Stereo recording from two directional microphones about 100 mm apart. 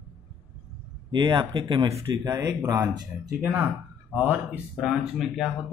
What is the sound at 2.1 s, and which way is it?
Speech, 40° right (ahead or behind).